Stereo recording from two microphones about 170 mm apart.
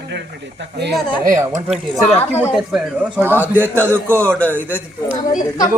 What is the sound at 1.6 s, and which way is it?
Speech, centre (ahead or behind).